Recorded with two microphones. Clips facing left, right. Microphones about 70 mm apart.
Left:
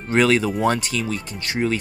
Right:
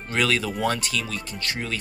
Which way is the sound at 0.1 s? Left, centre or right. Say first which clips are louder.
Left 6 dB; left.